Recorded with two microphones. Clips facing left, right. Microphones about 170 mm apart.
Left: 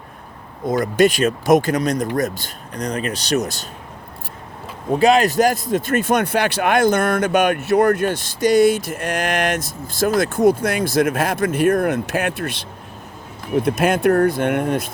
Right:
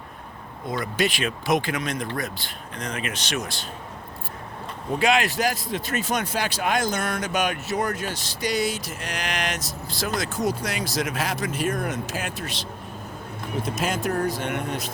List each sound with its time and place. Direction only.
0.7 s speech: 45° left (ahead or behind)
4.9 s speech: 35° left (ahead or behind); by 14.9 s 55° left (ahead or behind)